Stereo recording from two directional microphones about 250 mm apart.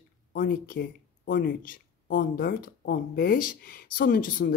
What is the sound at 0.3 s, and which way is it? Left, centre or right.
Speech, left.